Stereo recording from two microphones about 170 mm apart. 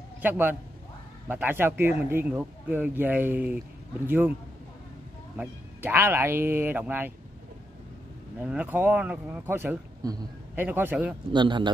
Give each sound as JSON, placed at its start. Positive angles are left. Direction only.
{"t": 0.2, "sound": "speech", "side_deg": -10}
{"t": 5.4, "sound": "speech", "side_deg": -15}
{"t": 8.4, "sound": "speech", "side_deg": -10}
{"t": 11.3, "sound": "a man's voice", "side_deg": -25}